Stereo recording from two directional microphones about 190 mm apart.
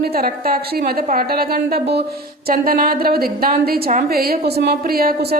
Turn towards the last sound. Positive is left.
turn(degrees=-55)  # may be behind; listen again after turning